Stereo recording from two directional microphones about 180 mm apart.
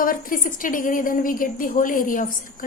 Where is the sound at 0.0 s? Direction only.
50° left (ahead or behind).